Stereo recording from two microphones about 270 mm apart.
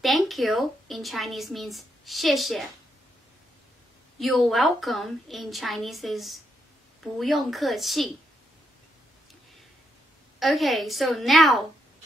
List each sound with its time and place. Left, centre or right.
0.0 s a woman's voice: centre
4.2 s a woman's voice: centre
10.4 s a woman's voice: centre